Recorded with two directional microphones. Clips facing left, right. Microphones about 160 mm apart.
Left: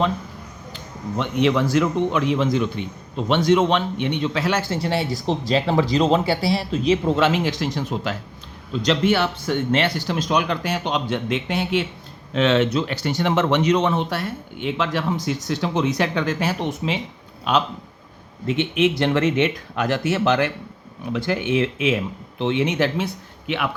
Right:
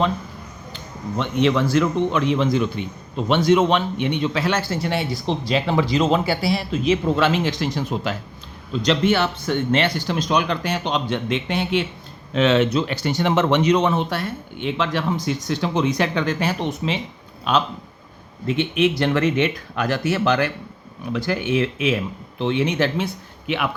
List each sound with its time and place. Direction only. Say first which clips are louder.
1.1 s a man's voice: even; 15° left (ahead or behind); by 4.4 s 10° right (ahead or behind)
4.6 s speech: left 1 dB; 25° left (ahead or behind); by 8.1 s 10° right (ahead or behind)
8.7 s a man's voice: even; centre (ahead or behind)
12.3 s a man's voice: right 1 dB; 5° right (ahead or behind)
12.7 s speech: right 1 dB; 20° right (ahead or behind)
13.8 s a man's voice: right 1 dB; 5° right (ahead or behind); by 22.9 s 20° left (ahead or behind)
23.5 s speech: right 1 dB; 10° right (ahead or behind)